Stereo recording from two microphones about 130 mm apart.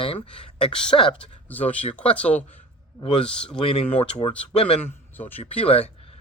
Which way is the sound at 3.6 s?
50° left (ahead or behind).